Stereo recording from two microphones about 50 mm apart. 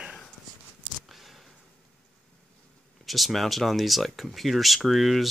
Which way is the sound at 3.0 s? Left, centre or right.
Centre.